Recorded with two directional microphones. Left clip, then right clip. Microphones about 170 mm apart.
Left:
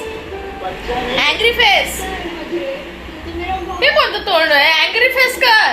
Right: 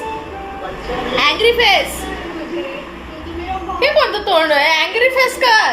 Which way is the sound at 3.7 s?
20° right (ahead or behind).